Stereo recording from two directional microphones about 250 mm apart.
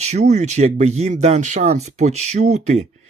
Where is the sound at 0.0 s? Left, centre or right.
Right.